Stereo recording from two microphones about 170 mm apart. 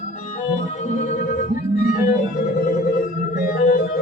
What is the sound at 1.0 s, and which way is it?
Music, 45° left (ahead or behind).